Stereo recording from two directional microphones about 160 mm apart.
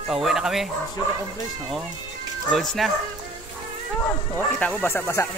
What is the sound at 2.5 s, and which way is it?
Speech, centre (ahead or behind).